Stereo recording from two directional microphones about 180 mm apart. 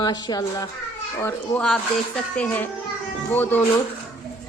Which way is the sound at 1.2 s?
5° left (ahead or behind).